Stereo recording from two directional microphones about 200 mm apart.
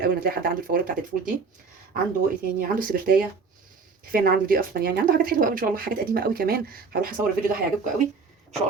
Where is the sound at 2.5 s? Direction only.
45° right (ahead or behind).